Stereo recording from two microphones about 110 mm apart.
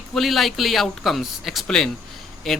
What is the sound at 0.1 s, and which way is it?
A man's voice, centre (ahead or behind).